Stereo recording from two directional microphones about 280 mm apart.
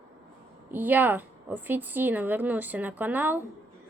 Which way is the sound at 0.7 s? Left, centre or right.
Centre.